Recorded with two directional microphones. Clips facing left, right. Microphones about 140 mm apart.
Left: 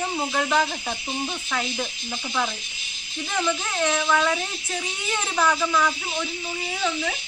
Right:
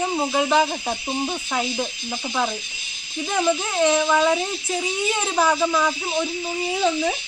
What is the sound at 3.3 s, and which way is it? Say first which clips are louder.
Speech: right 5 dB; 20° right (ahead or behind).